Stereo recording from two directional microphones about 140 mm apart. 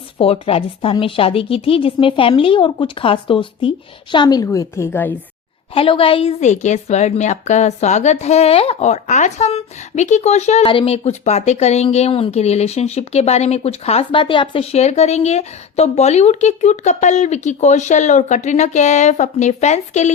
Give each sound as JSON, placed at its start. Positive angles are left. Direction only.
{"t": 0.2, "sound": "a woman's voice", "side_deg": 45}
{"t": 5.7, "sound": "a woman's voice", "side_deg": 40}